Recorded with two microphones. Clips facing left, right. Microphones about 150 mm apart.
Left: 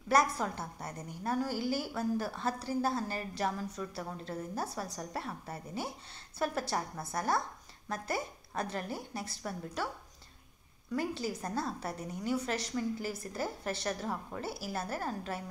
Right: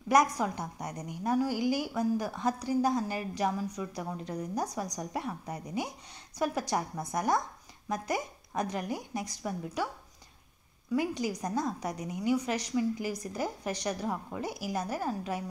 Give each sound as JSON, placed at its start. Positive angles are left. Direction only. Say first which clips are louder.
{"t": 0.1, "sound": "a woman's voice", "louder": "right 3 dB", "side_deg": -15}
{"t": 10.9, "sound": "a woman's voice", "louder": "right 4 dB", "side_deg": -15}